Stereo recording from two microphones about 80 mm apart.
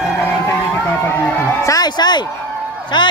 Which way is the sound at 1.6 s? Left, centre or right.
Left.